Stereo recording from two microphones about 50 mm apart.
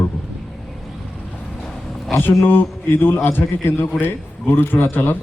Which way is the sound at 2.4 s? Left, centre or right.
Left.